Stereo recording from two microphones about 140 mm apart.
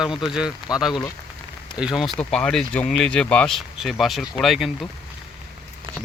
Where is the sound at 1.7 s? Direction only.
5° right (ahead or behind).